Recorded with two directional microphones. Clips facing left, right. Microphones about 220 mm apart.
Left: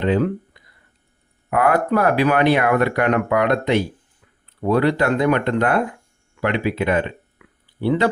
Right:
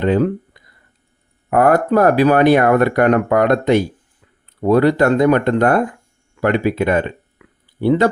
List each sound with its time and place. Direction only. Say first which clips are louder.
0.0 s speech: right 3 dB; 45° right (ahead or behind)